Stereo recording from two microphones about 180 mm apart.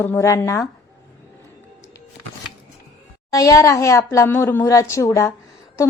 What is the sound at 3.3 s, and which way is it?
A woman's voice, 15° left (ahead or behind).